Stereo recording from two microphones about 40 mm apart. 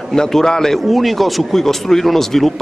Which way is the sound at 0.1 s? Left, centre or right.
Centre.